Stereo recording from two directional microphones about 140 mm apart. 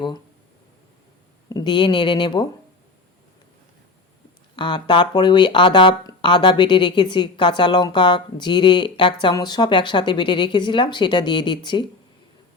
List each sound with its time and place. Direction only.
1.5 s a woman's voice: 30° left (ahead or behind)
4.5 s a woman's voice: 35° left (ahead or behind)